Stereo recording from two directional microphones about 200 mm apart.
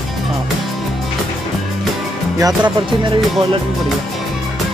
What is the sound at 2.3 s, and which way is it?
Speech, 20° right (ahead or behind).